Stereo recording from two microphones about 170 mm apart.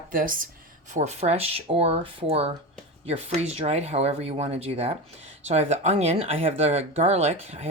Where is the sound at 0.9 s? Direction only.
40° right (ahead or behind).